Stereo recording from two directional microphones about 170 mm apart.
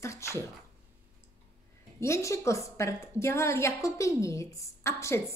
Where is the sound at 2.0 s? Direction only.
15° left (ahead or behind).